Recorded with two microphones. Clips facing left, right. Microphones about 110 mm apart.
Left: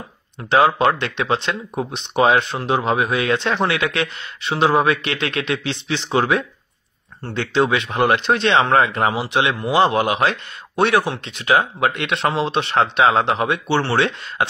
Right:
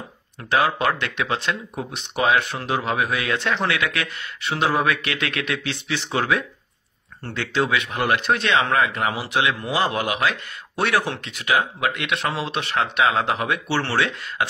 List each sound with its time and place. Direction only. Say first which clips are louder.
0.5 s speech: left 5 dB; 25° left (ahead or behind)
9.1 s speech: left 3 dB; 25° left (ahead or behind)
10.8 s speech: left 5 dB; 20° left (ahead or behind)
11.4 s speech: left 4 dB; 30° left (ahead or behind)